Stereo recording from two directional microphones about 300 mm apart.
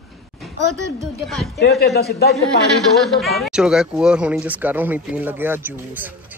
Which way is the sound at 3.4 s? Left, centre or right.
Centre.